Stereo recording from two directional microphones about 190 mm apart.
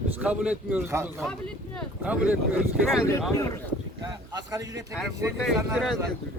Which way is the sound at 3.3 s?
15° left (ahead or behind).